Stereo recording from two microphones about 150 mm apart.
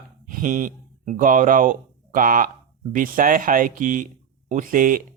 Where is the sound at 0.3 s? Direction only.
65° right (ahead or behind).